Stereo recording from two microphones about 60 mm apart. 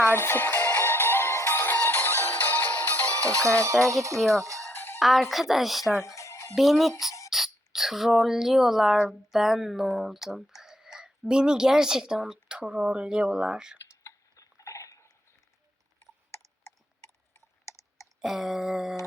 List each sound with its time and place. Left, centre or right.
0.2 s music: left
1.3 s music: left
3.2 s speech: right
4.4 s music: right
4.7 s music: left
4.9 s a woman's voice: centre
6.0 s music: left
6.5 s a woman's voice: centre
14.0 s a sound: left
17.7 s clicking: left
18.0 s a sound: centre